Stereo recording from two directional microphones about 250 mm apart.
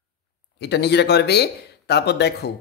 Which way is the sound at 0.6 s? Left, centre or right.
Left.